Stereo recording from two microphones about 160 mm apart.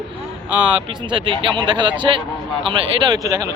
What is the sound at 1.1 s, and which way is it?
A man's voice, 30° right (ahead or behind).